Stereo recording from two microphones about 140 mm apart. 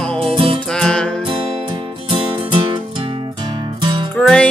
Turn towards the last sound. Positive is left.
turn(degrees=0)  # may be behind; listen again after turning